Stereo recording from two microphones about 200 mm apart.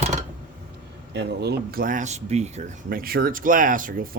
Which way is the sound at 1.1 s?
55° right (ahead or behind).